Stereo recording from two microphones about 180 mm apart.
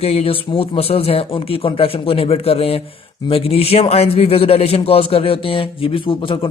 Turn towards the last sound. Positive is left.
turn(degrees=30)  # may be behind; listen again after turning